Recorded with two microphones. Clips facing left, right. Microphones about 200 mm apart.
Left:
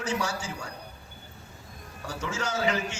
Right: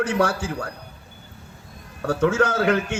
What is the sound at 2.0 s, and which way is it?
Speech, 55° right (ahead or behind).